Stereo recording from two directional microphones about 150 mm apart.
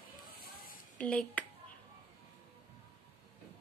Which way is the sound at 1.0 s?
10° left (ahead or behind).